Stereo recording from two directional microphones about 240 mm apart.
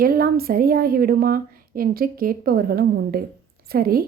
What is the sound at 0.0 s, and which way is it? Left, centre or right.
Speech, right.